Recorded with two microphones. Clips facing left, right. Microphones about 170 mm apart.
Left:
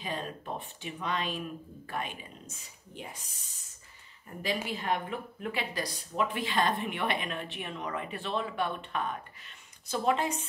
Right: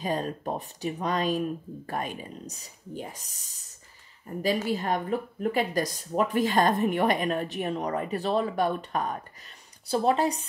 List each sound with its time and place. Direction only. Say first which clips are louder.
0.0 s a woman's voice: right 8 dB; 40° right (ahead or behind)
4.6 s a woman's voice: right 5 dB; 40° right (ahead or behind)